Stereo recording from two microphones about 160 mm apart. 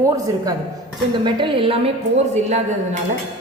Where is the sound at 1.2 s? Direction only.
30° right (ahead or behind).